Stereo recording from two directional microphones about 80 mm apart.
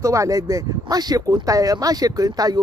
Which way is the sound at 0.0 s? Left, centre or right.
Right.